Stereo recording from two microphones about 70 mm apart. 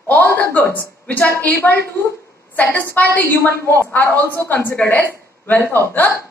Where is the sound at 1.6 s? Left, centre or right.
Left.